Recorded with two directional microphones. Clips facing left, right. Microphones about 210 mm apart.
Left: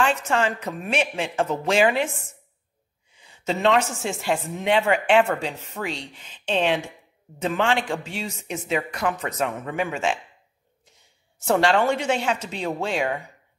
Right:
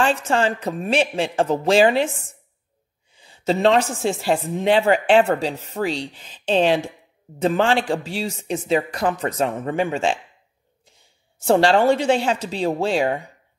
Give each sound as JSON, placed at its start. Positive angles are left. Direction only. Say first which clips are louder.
{"t": 0.0, "sound": "a woman's voice", "louder": "right 3 dB", "side_deg": -35}
{"t": 3.2, "sound": "a woman's voice", "louder": "right 5 dB", "side_deg": -30}
{"t": 11.3, "sound": "a woman's voice", "louder": "right 4 dB", "side_deg": -30}